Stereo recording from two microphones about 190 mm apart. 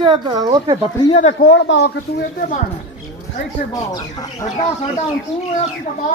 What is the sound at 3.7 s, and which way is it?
Speech, 20° left (ahead or behind).